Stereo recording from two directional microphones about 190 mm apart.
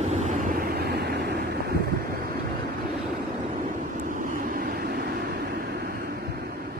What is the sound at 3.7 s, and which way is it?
Vehicle, 45° right (ahead or behind).